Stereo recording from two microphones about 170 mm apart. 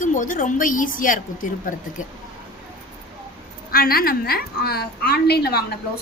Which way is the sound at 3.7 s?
60° left (ahead or behind).